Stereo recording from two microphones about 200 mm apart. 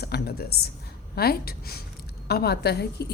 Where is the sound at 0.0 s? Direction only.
55° left (ahead or behind).